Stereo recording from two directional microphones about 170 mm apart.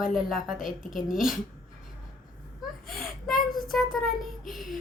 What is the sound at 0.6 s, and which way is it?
Speech, 50° left (ahead or behind).